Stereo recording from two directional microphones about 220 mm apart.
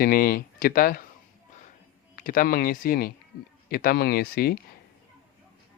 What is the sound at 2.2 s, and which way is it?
Speech, 40° left (ahead or behind).